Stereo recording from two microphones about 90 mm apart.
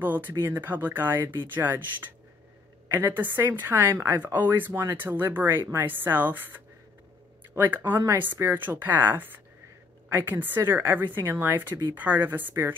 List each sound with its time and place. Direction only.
0.0 s a woman's voice: 20° right (ahead or behind)